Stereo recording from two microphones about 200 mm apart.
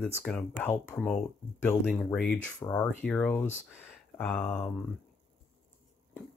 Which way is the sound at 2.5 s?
20° left (ahead or behind).